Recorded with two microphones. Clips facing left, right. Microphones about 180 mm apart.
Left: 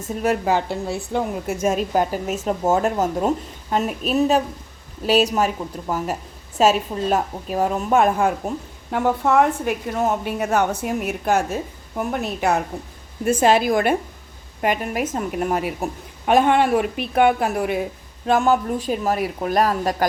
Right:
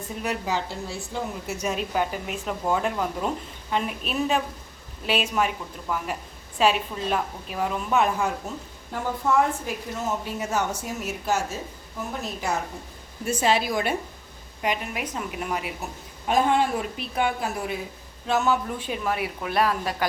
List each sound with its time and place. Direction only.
0.0 s a woman's voice: 45° left (ahead or behind); by 12.5 s 65° left (ahead or behind)
13.2 s a woman's voice: 50° left (ahead or behind)
18.3 s a woman's voice: 50° left (ahead or behind)